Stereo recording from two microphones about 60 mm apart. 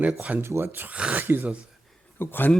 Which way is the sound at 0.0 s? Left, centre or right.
Right.